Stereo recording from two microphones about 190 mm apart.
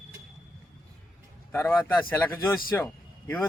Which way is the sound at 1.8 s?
10° left (ahead or behind).